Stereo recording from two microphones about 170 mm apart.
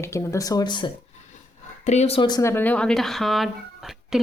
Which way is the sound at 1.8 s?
40° left (ahead or behind).